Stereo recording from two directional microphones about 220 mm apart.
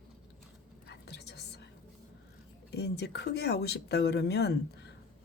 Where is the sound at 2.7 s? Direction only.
50° left (ahead or behind).